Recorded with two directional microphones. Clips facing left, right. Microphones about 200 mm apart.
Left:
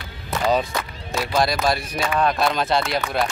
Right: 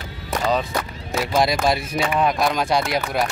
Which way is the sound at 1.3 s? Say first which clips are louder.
Right 1 dB; 25° right (ahead or behind).